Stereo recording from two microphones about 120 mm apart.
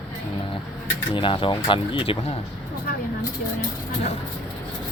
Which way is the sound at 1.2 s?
45° left (ahead or behind).